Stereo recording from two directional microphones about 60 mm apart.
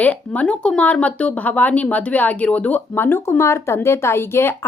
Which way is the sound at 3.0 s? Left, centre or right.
Left.